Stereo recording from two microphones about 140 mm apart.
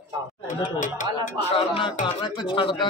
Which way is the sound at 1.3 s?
45° left (ahead or behind).